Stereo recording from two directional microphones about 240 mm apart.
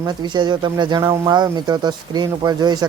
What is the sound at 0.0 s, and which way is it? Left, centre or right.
Speech, centre.